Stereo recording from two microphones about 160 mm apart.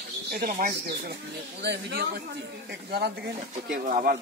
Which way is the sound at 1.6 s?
90° right.